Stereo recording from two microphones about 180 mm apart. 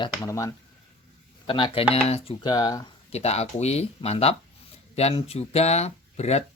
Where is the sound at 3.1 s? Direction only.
35° left (ahead or behind).